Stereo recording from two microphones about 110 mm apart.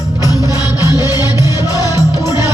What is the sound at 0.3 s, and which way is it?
Music, 30° right (ahead or behind).